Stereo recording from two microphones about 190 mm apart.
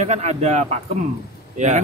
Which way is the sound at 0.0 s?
35° right (ahead or behind).